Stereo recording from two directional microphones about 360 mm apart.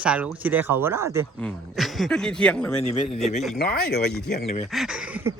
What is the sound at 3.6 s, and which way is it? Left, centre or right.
Speech, left.